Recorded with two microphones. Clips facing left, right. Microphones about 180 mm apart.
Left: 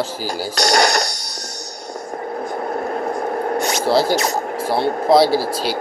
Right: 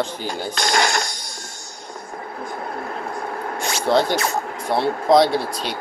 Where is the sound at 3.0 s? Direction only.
40° left (ahead or behind).